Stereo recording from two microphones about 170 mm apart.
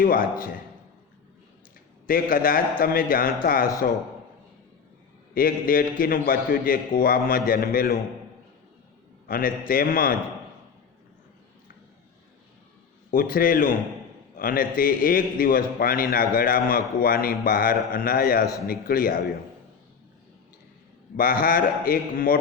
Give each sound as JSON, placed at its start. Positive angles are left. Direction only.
{"t": 0.0, "sound": "a man's voice", "side_deg": 55}
{"t": 2.0, "sound": "a man's voice", "side_deg": 55}
{"t": 5.3, "sound": "a man's voice", "side_deg": 55}
{"t": 9.2, "sound": "a man's voice", "side_deg": 55}
{"t": 13.1, "sound": "a man's voice", "side_deg": 55}
{"t": 21.2, "sound": "a man's voice", "side_deg": 55}